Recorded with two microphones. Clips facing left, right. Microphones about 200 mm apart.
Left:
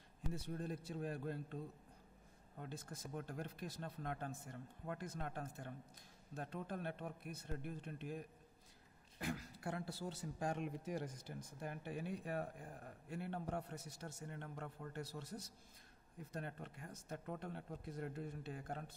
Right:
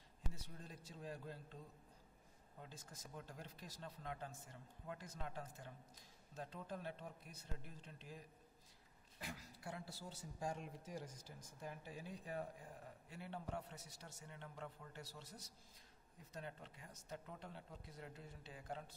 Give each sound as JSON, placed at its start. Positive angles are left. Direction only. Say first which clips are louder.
{"t": 0.3, "sound": "a man's voice", "louder": "left 12 dB", "side_deg": 60}
{"t": 2.6, "sound": "a man's voice", "louder": "left 8 dB", "side_deg": 60}